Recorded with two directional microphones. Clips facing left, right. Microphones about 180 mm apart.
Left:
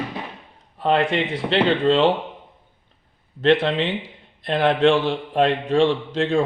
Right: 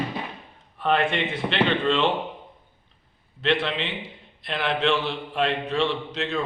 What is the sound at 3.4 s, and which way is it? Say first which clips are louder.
A man's voice: left 7 dB; 45° left (ahead or behind).